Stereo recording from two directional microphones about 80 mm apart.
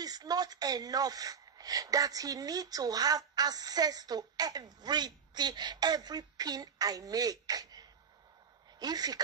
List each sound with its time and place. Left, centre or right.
0.0 s speech: right